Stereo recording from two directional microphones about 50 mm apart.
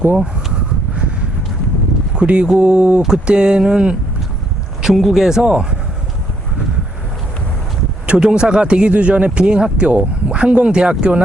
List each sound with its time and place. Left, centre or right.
2.1 s speech: right
8.2 s speech: centre